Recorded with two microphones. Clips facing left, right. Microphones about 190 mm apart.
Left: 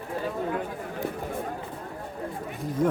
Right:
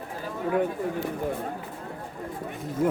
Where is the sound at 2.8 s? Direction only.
5° right (ahead or behind).